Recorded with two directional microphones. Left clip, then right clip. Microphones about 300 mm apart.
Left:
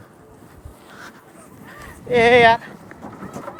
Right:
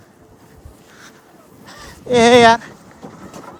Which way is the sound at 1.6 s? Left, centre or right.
Right.